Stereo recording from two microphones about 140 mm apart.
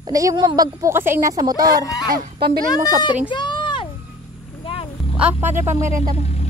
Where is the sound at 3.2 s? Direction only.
35° left (ahead or behind).